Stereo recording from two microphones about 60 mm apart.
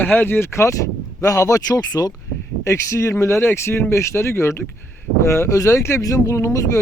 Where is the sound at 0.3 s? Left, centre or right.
Left.